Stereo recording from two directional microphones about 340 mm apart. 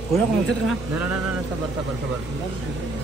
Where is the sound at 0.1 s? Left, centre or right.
Centre.